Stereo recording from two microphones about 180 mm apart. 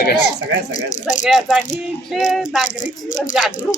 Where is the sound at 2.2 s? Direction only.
45° left (ahead or behind).